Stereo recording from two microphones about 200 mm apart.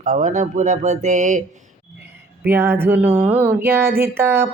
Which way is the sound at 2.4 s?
10° right (ahead or behind).